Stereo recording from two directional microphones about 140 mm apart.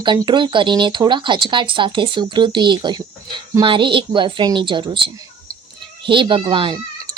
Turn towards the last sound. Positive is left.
turn(degrees=-35)  # may be behind; listen again after turning